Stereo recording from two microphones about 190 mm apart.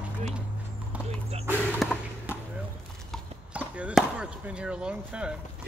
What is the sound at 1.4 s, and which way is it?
Speech, 10° right (ahead or behind).